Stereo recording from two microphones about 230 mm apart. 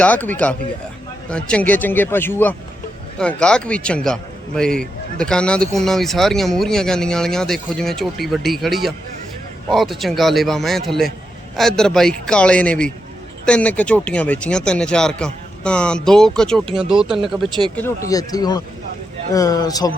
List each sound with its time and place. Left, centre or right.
0.0 s a man's voice: centre
16.6 s speech: right
17.2 s speech: centre